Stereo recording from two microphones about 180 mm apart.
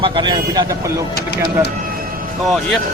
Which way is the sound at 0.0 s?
25° right (ahead or behind).